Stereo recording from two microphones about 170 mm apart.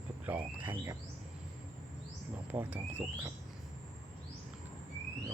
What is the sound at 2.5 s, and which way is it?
Speech, 10° right (ahead or behind).